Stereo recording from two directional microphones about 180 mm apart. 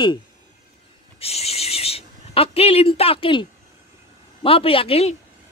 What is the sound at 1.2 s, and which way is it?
A man's voice, 35° left (ahead or behind).